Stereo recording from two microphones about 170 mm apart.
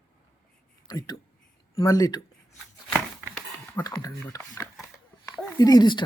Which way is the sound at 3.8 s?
20° left (ahead or behind).